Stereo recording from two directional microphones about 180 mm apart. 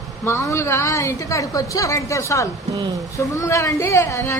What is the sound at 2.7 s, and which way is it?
Speech, 25° right (ahead or behind).